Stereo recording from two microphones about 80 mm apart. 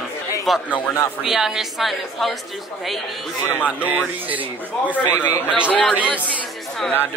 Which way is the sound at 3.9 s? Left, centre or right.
Right.